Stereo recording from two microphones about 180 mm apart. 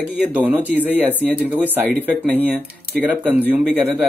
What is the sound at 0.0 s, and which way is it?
Speech, 10° right (ahead or behind).